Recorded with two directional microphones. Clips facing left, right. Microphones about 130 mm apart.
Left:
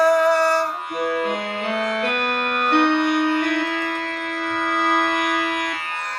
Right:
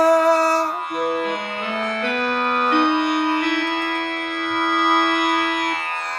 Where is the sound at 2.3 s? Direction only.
35° right (ahead or behind).